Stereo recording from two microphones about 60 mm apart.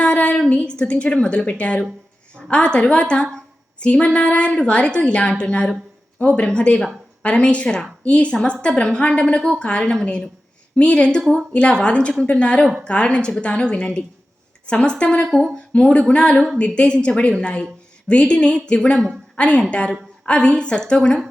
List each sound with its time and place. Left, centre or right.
0.0 s a woman's voice: left
11.2 s a woman's voice: centre
11.5 s a woman's voice: centre
16.3 s a woman's voice: centre
16.6 s a woman's voice: left